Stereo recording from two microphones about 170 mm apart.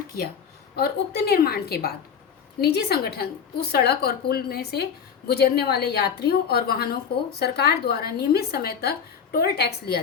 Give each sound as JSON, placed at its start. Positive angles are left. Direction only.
{"t": 0.8, "sound": "a woman's voice", "side_deg": 70}